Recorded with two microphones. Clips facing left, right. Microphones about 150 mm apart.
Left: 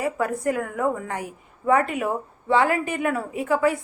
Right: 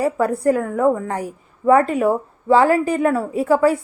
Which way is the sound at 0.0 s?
35° right (ahead or behind).